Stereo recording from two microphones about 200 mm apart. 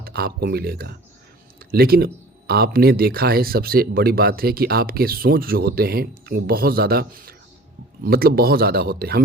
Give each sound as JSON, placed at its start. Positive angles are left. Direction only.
{"t": 0.0, "sound": "speech", "side_deg": -50}